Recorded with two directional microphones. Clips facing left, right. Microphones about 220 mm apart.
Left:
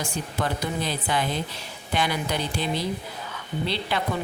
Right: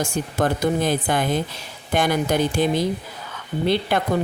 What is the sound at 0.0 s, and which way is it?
Speech, 45° right (ahead or behind).